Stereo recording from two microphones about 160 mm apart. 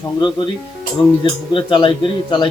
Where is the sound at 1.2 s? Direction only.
30° left (ahead or behind).